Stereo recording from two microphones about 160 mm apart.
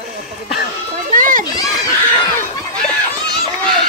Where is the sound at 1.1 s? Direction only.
60° right (ahead or behind).